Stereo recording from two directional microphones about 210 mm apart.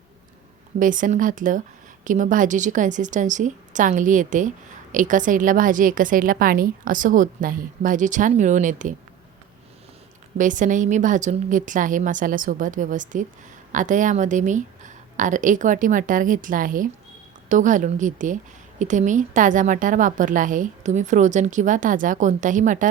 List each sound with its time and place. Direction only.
0.8 s a woman's voice: 40° right (ahead or behind)
10.3 s a woman's voice: 35° right (ahead or behind)